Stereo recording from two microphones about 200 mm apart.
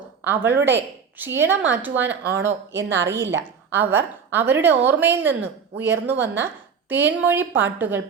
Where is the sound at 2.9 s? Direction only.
65° right (ahead or behind).